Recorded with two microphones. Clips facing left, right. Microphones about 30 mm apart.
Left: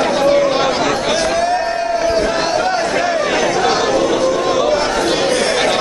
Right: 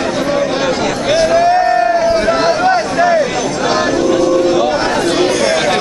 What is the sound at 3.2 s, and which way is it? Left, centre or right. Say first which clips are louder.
Chatter: left 1 dB; centre.